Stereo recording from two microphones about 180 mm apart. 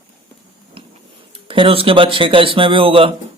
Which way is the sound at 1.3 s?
30° right (ahead or behind).